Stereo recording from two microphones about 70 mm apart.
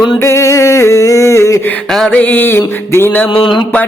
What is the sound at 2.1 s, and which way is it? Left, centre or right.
Music, left.